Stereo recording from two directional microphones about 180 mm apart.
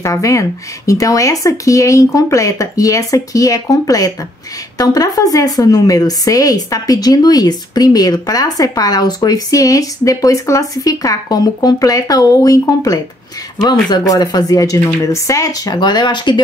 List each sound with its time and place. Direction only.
0.0 s a woman's voice: 15° left (ahead or behind)